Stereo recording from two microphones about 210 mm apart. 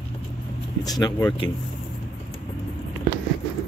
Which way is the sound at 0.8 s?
20° left (ahead or behind).